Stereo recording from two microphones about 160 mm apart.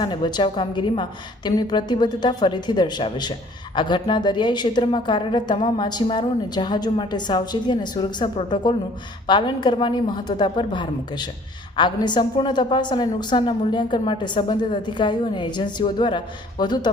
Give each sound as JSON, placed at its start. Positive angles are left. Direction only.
{"t": 0.0, "sound": "a woman's voice", "side_deg": 30}